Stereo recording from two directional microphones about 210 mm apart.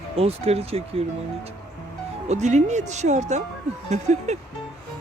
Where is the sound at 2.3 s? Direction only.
35° right (ahead or behind).